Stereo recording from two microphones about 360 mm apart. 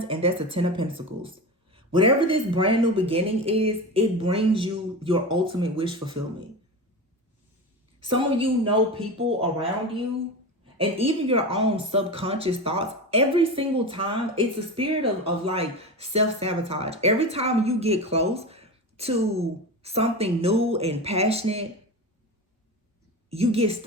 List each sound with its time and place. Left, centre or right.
0.0 s speech: centre
8.0 s speech: centre
23.3 s speech: centre